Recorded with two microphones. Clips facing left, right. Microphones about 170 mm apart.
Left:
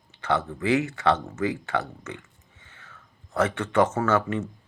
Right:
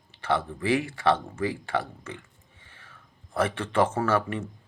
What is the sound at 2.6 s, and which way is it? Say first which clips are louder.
Whispering: left 2 dB; 30° right (ahead or behind).